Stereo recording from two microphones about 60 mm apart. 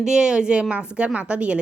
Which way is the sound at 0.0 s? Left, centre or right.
Centre.